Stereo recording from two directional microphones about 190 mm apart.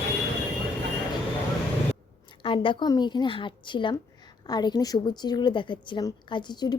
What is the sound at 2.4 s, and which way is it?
Speech, 25° left (ahead or behind).